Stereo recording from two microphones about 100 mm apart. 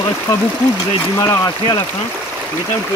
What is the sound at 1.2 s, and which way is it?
Speech, 40° left (ahead or behind).